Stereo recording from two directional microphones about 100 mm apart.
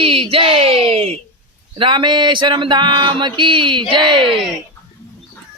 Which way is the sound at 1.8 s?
55° right (ahead or behind).